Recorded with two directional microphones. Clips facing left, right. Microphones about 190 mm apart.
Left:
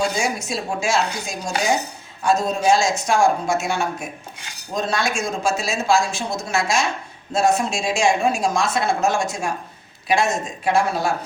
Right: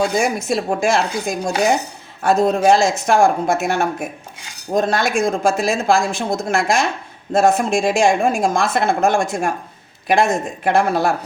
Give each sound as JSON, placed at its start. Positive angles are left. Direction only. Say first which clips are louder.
{"t": 0.2, "sound": "speech", "louder": "right 5 dB", "side_deg": -55}